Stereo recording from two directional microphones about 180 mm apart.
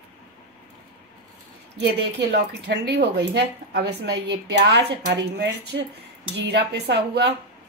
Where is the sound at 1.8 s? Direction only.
65° right (ahead or behind).